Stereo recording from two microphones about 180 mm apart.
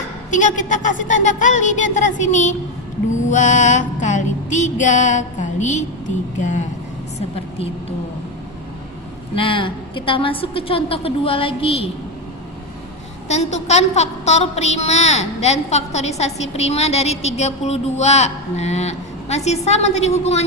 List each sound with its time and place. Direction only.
0.3 s a sound: 45° left (ahead or behind)
6.4 s a woman's voice: 40° left (ahead or behind)
9.3 s a woman's voice: 30° left (ahead or behind)
13.2 s a woman's voice: 40° left (ahead or behind)